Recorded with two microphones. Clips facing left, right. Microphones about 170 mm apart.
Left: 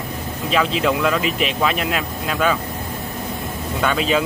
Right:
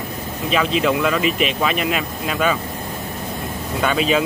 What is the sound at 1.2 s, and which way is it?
Speech, 55° right (ahead or behind).